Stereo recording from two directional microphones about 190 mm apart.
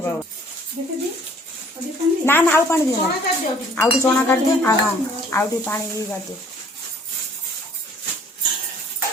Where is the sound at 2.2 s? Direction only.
10° left (ahead or behind).